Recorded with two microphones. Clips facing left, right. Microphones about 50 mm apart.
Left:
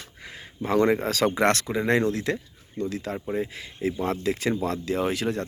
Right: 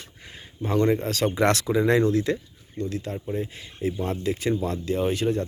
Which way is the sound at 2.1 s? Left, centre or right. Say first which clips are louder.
Right 4 dB; left.